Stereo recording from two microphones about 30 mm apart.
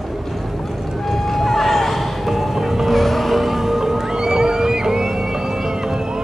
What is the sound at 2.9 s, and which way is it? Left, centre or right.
Music, centre.